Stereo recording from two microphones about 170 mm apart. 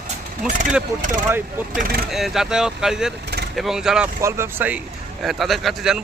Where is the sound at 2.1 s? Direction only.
Centre (ahead or behind).